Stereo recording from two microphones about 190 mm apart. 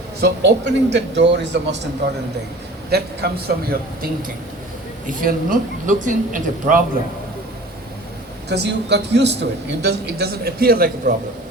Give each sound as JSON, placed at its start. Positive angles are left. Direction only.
{"t": 0.2, "sound": "a man's voice", "side_deg": -65}
{"t": 2.9, "sound": "a woman's voice", "side_deg": -55}
{"t": 8.4, "sound": "a man's voice", "side_deg": -60}